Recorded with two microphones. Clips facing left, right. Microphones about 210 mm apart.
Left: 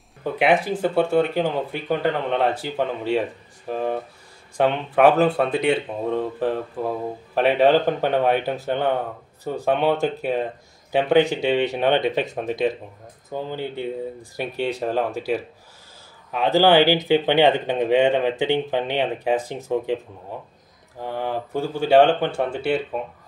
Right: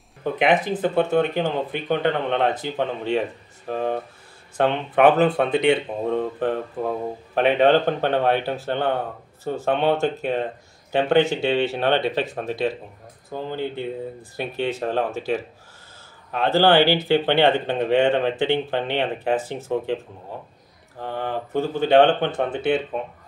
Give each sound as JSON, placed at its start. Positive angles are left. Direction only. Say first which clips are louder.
{"t": 0.2, "sound": "speech", "louder": "even", "side_deg": 5}
{"t": 21.0, "sound": "a sound", "louder": "left 1 dB", "side_deg": 10}
{"t": 21.7, "sound": "speech", "louder": "left 1 dB", "side_deg": 10}